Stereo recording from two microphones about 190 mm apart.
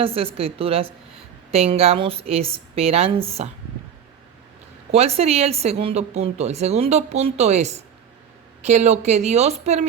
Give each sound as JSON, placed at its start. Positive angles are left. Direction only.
{"t": 0.0, "sound": "a woman's voice", "side_deg": -30}
{"t": 4.9, "sound": "a woman's voice", "side_deg": -35}